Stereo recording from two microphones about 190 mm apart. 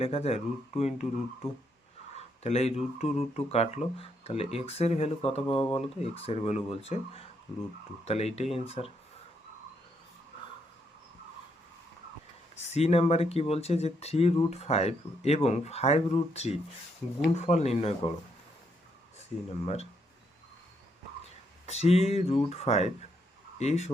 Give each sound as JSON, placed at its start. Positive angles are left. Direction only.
{"t": 0.0, "sound": "speech", "side_deg": 35}
{"t": 2.1, "sound": "speech", "side_deg": 35}
{"t": 12.6, "sound": "speech", "side_deg": 35}
{"t": 19.5, "sound": "speech", "side_deg": 35}
{"t": 21.7, "sound": "speech", "side_deg": 35}